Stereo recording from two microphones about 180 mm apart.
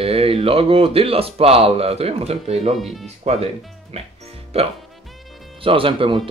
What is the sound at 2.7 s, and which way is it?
Speech, centre (ahead or behind).